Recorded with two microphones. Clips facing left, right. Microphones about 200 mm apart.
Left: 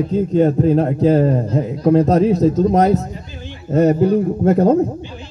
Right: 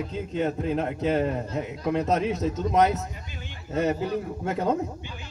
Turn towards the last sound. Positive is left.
turn(degrees=40)  # may be behind; listen again after turning